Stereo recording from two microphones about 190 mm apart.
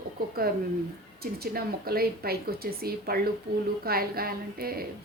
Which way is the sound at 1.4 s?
55° right (ahead or behind).